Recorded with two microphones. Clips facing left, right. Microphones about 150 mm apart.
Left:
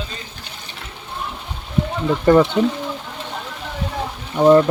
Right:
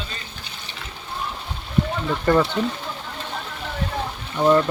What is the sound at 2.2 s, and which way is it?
Speech, 15° left (ahead or behind).